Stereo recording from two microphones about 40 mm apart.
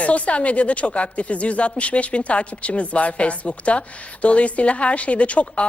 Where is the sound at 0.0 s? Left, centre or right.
Left.